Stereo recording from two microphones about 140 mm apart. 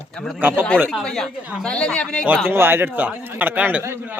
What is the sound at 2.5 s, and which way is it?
A man's voice, 15° right (ahead or behind).